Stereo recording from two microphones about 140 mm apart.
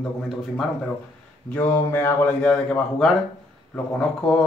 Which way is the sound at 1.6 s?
15° left (ahead or behind).